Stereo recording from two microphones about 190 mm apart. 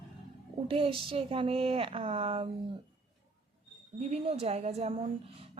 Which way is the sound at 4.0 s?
35° right (ahead or behind).